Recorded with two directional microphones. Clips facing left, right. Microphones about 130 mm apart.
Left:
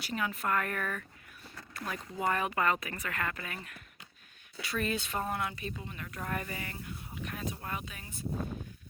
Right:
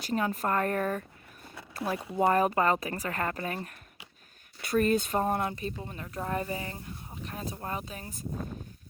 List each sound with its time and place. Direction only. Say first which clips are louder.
0.0 s speech: right 5 dB; 40° right (ahead or behind)